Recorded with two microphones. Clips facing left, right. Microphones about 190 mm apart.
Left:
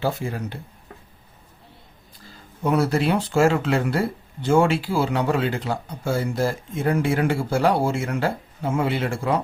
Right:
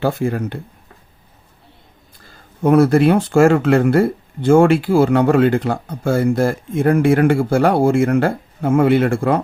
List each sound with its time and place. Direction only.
0.0 s speech: 60° right (ahead or behind)
2.6 s speech: 55° right (ahead or behind)